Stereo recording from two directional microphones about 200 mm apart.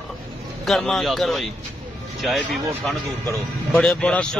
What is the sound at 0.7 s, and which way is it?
A man's voice, centre (ahead or behind).